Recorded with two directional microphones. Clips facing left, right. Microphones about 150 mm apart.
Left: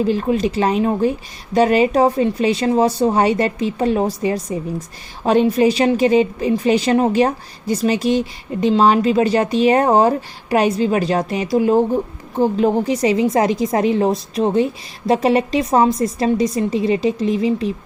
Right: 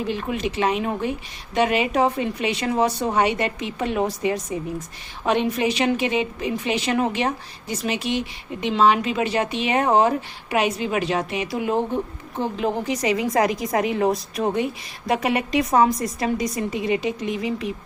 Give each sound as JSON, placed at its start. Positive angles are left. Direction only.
{"t": 0.1, "sound": "a woman's voice", "side_deg": 35}